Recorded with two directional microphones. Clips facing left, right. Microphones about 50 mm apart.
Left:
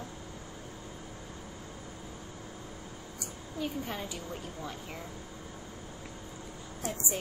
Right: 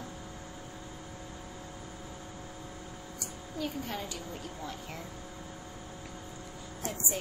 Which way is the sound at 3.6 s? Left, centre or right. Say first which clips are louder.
Even; centre.